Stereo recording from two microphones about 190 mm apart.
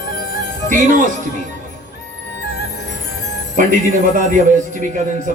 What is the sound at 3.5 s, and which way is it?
Speech, 45° right (ahead or behind).